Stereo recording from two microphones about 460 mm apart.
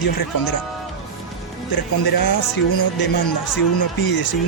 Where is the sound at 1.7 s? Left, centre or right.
Left.